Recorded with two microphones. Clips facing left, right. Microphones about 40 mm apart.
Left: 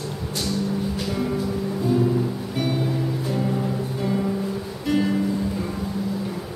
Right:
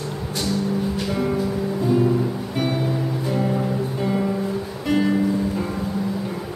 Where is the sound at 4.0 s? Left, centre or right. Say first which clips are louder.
Right 1 dB; centre.